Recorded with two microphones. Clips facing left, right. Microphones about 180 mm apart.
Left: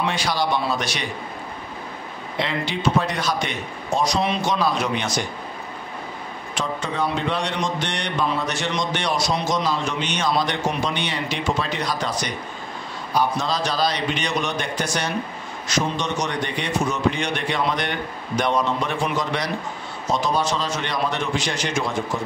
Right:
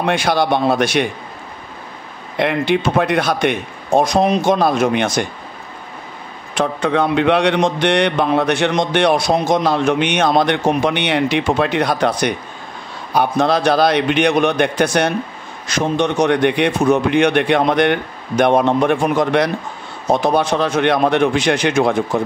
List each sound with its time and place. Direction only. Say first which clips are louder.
0.0 s speech: right 7 dB; 55° right (ahead or behind)
2.3 s speech: right 9 dB; 60° right (ahead or behind)
6.5 s speech: right 10 dB; 60° right (ahead or behind)